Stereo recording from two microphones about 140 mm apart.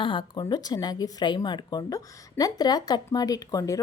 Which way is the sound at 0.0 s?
35° left (ahead or behind).